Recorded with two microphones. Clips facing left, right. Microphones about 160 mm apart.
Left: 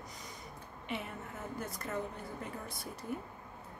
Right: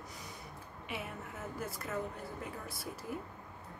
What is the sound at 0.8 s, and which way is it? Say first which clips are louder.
A woman's voice: left 2 dB; 5° right (ahead or behind).